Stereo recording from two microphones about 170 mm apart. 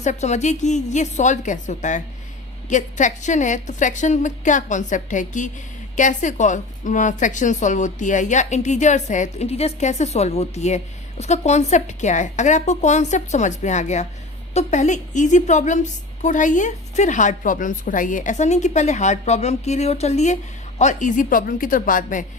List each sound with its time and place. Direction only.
0.0 s a woman's voice: 45° left (ahead or behind)